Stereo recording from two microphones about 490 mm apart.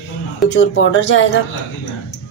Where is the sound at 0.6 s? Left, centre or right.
Left.